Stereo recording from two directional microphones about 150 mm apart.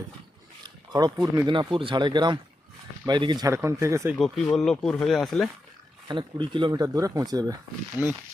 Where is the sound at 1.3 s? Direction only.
25° right (ahead or behind).